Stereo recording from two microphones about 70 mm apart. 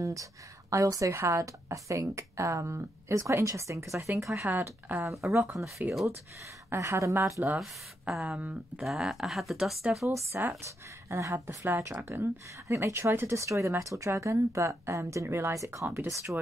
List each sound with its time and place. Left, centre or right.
0.0 s a woman's voice: right
4.5 s speech: right
5.2 s speech: right
6.7 s a woman's voice: right
7.4 s speech: right
8.8 s speech: centre
10.0 s speech: right
12.6 s a woman's voice: right
15.5 s a woman's voice: right
16.3 s speech: right